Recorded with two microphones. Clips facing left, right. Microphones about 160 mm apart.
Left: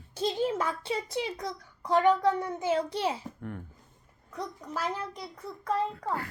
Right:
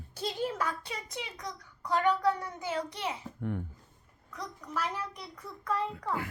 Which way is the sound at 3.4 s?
15° right (ahead or behind).